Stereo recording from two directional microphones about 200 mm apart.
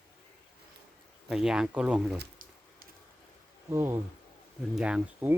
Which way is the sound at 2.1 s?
45° right (ahead or behind).